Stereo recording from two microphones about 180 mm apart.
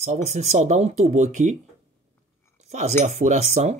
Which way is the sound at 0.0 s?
40° right (ahead or behind).